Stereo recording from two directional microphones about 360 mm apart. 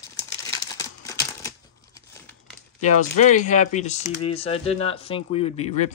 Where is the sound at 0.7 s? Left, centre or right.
Centre.